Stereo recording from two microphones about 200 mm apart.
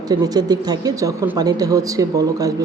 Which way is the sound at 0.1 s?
20° right (ahead or behind).